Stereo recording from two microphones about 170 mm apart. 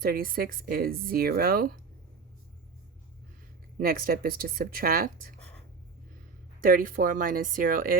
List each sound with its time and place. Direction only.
0.0 s speech: 60° right (ahead or behind)
3.8 s speech: 60° right (ahead or behind)
6.7 s speech: 55° right (ahead or behind)